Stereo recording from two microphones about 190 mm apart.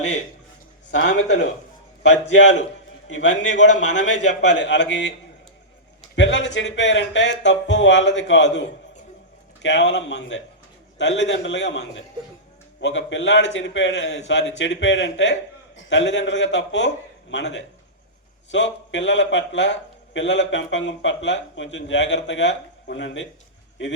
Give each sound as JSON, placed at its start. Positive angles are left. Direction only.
{"t": 0.9, "sound": "a man's voice", "side_deg": 70}
{"t": 6.1, "sound": "a man's voice", "side_deg": 75}
{"t": 9.6, "sound": "a man's voice", "side_deg": 70}